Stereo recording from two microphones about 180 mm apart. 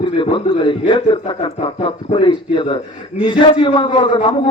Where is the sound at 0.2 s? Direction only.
30° left (ahead or behind).